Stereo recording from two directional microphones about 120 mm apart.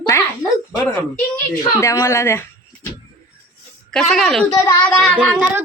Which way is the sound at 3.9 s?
5° left (ahead or behind).